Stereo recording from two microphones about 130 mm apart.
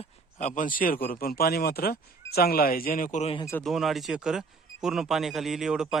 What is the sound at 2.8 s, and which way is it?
Speech, 90° left.